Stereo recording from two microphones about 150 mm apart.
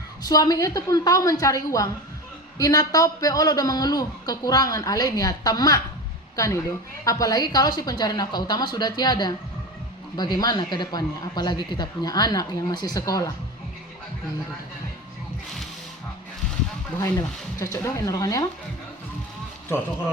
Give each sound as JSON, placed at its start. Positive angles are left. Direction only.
{"t": 0.3, "sound": "a man's voice", "side_deg": 25}
{"t": 17.0, "sound": "a man's voice", "side_deg": 20}